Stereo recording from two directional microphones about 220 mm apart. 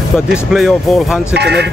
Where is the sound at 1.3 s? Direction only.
50° right (ahead or behind).